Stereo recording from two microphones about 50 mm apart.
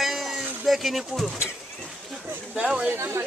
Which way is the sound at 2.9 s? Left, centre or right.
Right.